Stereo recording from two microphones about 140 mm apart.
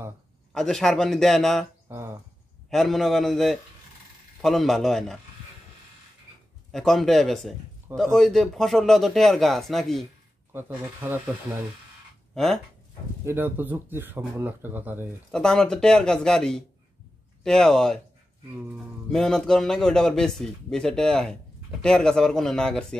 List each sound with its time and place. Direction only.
0.6 s speech: 5° left (ahead or behind)
1.9 s speech: 15° right (ahead or behind)
2.7 s speech: centre (ahead or behind)
6.7 s speech: centre (ahead or behind)
10.5 s speech: 15° right (ahead or behind)
13.2 s speech: 15° right (ahead or behind)
15.3 s speech: 5° left (ahead or behind)
19.1 s speech: 5° left (ahead or behind)